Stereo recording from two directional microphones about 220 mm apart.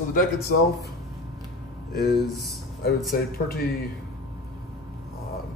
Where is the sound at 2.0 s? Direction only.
45° left (ahead or behind).